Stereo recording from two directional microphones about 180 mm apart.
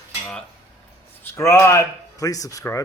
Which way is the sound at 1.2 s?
15° left (ahead or behind).